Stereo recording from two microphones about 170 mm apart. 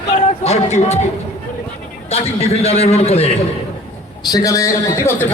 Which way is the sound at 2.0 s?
40° left (ahead or behind).